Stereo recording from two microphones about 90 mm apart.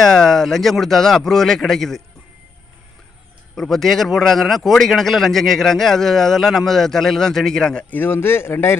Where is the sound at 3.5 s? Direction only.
5° left (ahead or behind).